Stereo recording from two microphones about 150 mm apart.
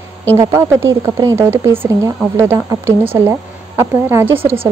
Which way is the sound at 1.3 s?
15° right (ahead or behind).